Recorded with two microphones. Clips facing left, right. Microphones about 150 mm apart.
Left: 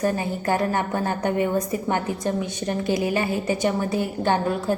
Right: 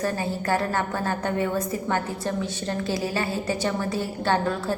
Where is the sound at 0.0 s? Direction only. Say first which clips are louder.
Left 3 dB; 15° left (ahead or behind).